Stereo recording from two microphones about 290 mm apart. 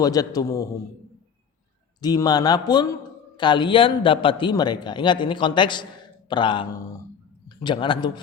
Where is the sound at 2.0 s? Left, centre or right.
Centre.